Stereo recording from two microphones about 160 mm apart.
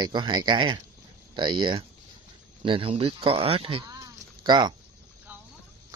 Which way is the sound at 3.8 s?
25° right (ahead or behind).